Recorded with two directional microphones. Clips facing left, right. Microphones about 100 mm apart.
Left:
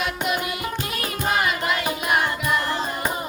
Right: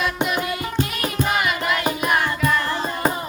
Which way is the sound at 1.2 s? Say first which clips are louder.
Right 1 dB; 30° left (ahead or behind).